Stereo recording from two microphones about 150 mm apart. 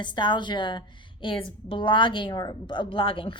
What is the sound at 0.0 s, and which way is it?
A woman's voice, 30° left (ahead or behind).